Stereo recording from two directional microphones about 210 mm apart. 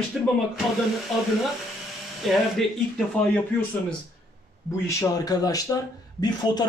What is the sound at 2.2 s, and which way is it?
Speech, centre (ahead or behind).